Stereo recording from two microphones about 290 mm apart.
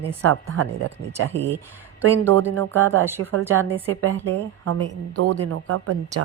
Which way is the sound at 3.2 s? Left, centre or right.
Right.